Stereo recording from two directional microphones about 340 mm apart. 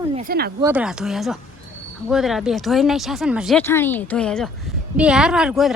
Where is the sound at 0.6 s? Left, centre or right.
Centre.